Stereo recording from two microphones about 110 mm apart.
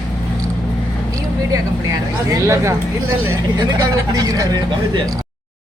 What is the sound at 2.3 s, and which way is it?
Speech, 25° right (ahead or behind).